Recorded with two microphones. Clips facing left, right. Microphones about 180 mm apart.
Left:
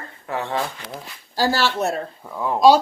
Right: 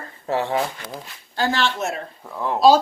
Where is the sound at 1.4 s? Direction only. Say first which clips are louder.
Left 2 dB; 35° left (ahead or behind).